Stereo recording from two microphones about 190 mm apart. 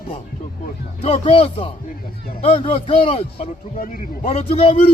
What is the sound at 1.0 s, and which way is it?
A man's voice, 30° left (ahead or behind).